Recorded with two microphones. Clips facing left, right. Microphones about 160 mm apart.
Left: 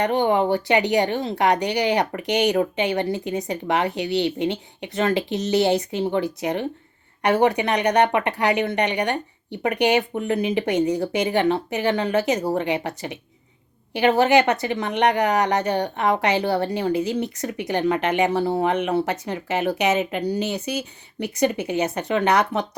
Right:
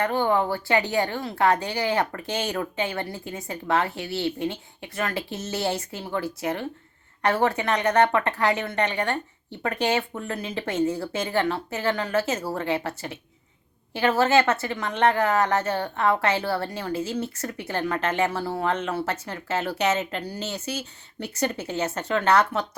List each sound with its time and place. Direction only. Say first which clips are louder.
0.0 s a woman's voice: left 3 dB; 20° left (ahead or behind)